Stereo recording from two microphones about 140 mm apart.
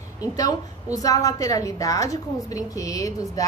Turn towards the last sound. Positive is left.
turn(degrees=25)  # may be behind; listen again after turning